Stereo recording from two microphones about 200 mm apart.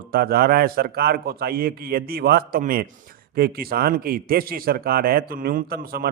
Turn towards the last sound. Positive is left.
turn(degrees=-50)  # may be behind; listen again after turning